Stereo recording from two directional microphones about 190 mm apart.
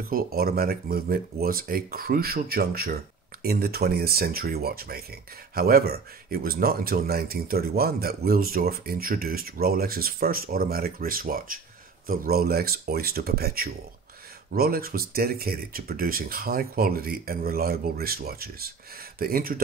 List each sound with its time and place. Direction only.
0.1 s speech: 55° right (ahead or behind)